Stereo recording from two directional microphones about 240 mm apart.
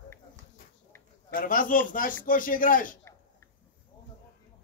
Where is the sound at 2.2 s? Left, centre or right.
Left.